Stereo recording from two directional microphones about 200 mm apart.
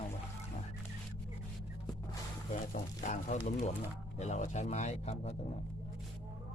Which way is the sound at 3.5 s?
35° left (ahead or behind).